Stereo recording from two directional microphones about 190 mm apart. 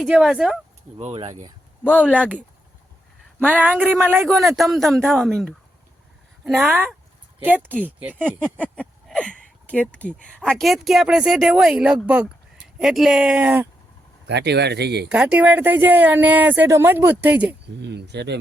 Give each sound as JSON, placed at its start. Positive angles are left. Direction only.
{"t": 0.0, "sound": "speech", "side_deg": -5}
{"t": 0.9, "sound": "speech", "side_deg": -30}
{"t": 1.8, "sound": "speech", "side_deg": 5}
{"t": 3.4, "sound": "speech", "side_deg": -10}
{"t": 4.3, "sound": "speech", "side_deg": 0}
{"t": 8.7, "sound": "a sound", "side_deg": 5}
{"t": 9.6, "sound": "speech", "side_deg": 5}
{"t": 14.3, "sound": "speech", "side_deg": -65}
{"t": 15.1, "sound": "speech", "side_deg": -5}
{"t": 17.7, "sound": "speech", "side_deg": -65}